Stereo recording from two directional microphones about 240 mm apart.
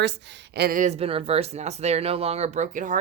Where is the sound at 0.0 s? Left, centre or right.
Right.